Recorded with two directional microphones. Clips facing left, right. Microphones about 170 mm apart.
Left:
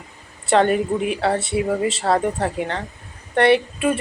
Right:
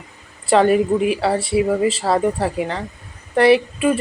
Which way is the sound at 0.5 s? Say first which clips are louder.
Right 3 dB; 5° right (ahead or behind).